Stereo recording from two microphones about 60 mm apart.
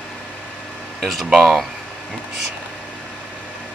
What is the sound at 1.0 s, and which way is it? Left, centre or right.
Speech, centre.